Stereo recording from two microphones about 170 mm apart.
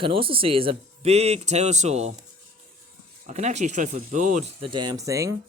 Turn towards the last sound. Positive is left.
turn(degrees=-20)  # may be behind; listen again after turning